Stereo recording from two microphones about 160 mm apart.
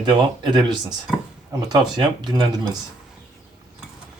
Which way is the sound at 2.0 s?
25° right (ahead or behind).